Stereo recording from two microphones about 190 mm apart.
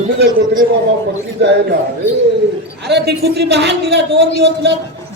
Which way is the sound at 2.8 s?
60° right (ahead or behind).